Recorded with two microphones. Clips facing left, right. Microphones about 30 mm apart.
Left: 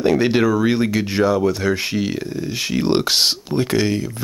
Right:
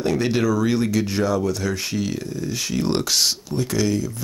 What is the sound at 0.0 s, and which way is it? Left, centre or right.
Speech, left.